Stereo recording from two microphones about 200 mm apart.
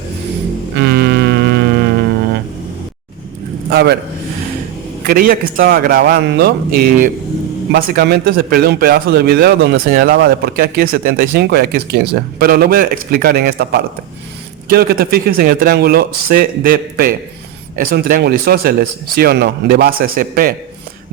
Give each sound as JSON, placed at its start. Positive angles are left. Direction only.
{"t": 0.8, "sound": "music", "side_deg": -55}
{"t": 3.7, "sound": "a man's voice", "side_deg": -55}
{"t": 5.0, "sound": "a man's voice", "side_deg": -45}